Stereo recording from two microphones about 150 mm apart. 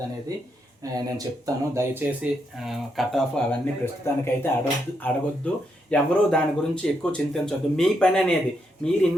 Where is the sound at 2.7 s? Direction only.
Centre (ahead or behind).